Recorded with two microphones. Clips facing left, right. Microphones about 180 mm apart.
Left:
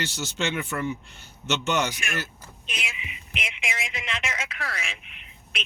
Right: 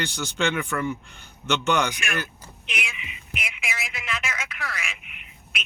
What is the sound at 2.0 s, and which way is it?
Speech, 70° right (ahead or behind).